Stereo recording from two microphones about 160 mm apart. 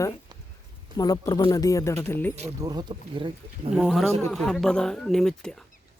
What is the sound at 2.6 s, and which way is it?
Speech, 25° right (ahead or behind).